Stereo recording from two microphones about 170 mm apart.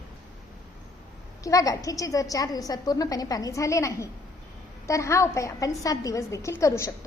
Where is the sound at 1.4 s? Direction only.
20° left (ahead or behind).